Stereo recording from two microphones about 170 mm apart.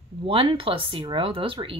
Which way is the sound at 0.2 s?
30° right (ahead or behind).